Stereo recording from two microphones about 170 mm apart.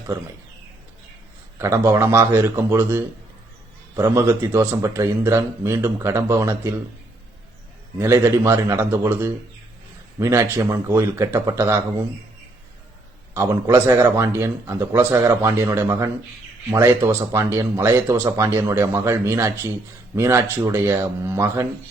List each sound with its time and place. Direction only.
1.5 s speech: 15° right (ahead or behind)
7.9 s speech: 15° right (ahead or behind)
13.3 s speech: 15° right (ahead or behind)